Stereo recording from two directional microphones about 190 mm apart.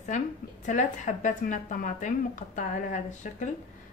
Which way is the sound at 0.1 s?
40° left (ahead or behind).